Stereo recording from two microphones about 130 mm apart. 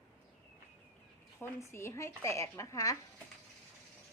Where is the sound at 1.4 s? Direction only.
20° left (ahead or behind).